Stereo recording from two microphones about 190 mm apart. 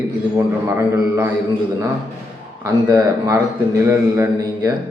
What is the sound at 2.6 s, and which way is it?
A man's voice, 15° right (ahead or behind).